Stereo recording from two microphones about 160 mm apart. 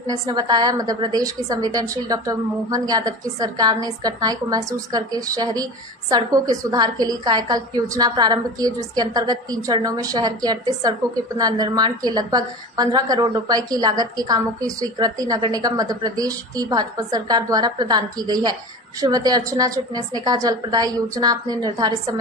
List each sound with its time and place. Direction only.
0.3 s a woman's voice: 25° right (ahead or behind)